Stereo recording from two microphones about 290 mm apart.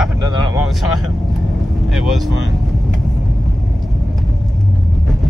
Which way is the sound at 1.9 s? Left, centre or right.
Centre.